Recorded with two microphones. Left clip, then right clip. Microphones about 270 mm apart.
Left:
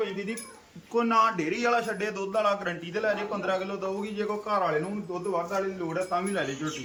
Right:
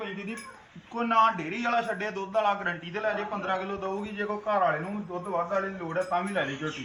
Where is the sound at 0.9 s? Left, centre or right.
Centre.